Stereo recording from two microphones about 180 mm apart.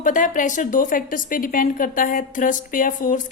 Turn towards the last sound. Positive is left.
turn(degrees=45)  # may be behind; listen again after turning